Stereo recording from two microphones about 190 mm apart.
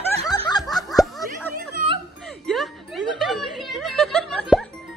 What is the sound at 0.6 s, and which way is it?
Snicker, centre (ahead or behind).